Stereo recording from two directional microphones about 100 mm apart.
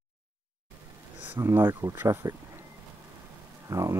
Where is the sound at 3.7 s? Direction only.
35° right (ahead or behind).